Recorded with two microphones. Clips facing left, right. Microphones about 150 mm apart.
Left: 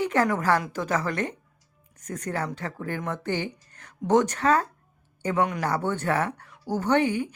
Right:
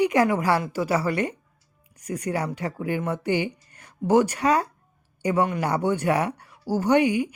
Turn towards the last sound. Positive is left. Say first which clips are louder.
# right 3 dB
turn(degrees=-10)  # may be behind; listen again after turning